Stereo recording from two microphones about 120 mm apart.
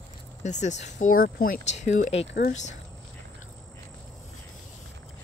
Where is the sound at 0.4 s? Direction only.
80° left.